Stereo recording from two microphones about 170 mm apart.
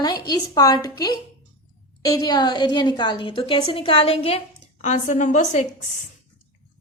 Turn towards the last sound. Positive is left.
turn(degrees=45)  # may be behind; listen again after turning